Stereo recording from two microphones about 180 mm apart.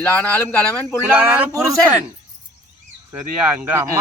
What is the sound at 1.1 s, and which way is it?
Speech, 10° right (ahead or behind).